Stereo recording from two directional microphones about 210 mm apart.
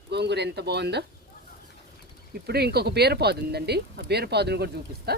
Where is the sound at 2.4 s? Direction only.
50° right (ahead or behind).